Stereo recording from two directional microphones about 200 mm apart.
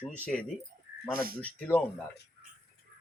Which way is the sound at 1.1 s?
45° right (ahead or behind).